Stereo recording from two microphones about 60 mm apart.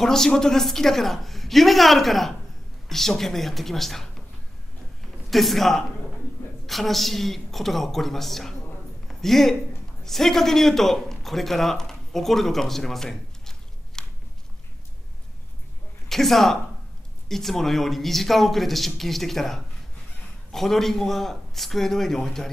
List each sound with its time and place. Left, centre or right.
0.0 s speech: centre
5.3 s speech: centre
9.0 s a sound: centre
10.0 s a man's voice: centre
16.1 s speech: centre